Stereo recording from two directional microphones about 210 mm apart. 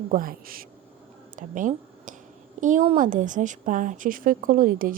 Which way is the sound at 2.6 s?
35° right (ahead or behind).